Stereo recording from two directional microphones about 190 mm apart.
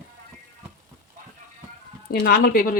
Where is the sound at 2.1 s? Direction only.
50° left (ahead or behind).